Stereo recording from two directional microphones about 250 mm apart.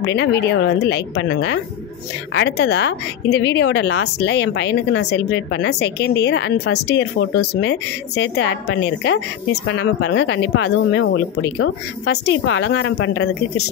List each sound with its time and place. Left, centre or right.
0.0 s a woman's voice: left